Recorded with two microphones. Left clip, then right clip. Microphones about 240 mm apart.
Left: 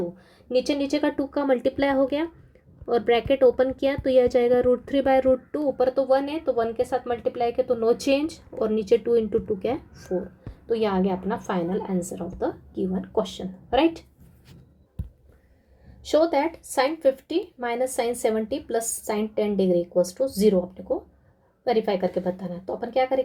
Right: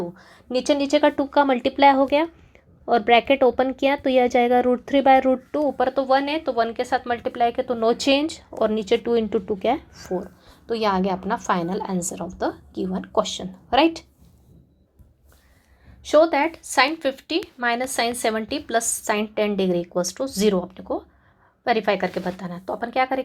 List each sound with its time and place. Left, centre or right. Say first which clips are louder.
0.2 s a woman's voice: left 2 dB; centre
16.0 s a woman's voice: right 4 dB; centre